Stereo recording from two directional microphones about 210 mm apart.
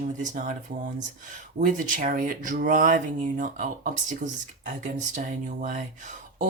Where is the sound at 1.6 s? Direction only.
40° right (ahead or behind).